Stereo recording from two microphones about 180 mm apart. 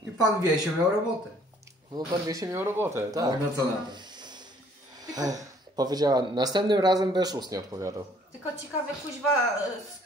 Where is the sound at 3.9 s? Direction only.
25° right (ahead or behind).